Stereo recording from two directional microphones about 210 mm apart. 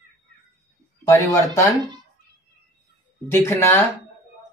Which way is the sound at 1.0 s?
15° left (ahead or behind).